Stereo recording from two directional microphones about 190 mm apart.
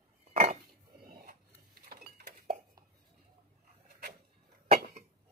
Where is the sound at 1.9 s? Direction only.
50° right (ahead or behind).